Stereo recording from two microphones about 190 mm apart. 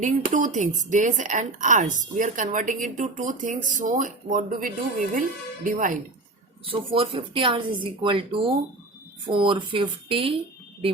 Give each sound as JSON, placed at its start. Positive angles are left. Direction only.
{"t": 0.0, "sound": "a woman's voice", "side_deg": -40}
{"t": 6.7, "sound": "speech", "side_deg": -30}